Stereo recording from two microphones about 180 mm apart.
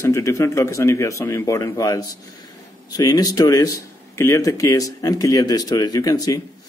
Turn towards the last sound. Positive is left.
turn(degrees=20)  # may be behind; listen again after turning